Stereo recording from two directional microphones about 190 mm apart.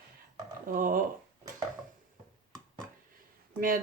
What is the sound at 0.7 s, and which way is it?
Speech, 45° right (ahead or behind).